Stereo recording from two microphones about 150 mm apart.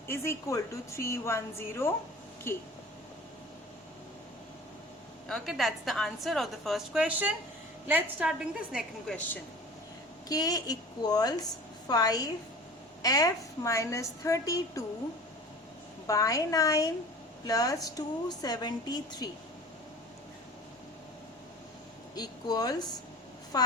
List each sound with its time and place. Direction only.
0.1 s a woman's voice: 20° left (ahead or behind)
5.3 s a woman's voice: centre (ahead or behind)
8.3 s a woman's voice: centre (ahead or behind)
9.1 s a woman's voice: 10° left (ahead or behind)
10.2 s a woman's voice: 25° left (ahead or behind)
16.0 s a woman's voice: 20° left (ahead or behind)
22.1 s a woman's voice: 25° left (ahead or behind)